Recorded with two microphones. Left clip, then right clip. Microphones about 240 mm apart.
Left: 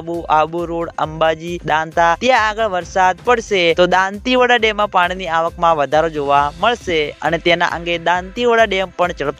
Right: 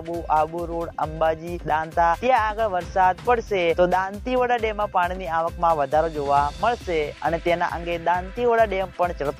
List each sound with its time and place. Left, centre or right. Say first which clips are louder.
0.3 s speech: left 7 dB; left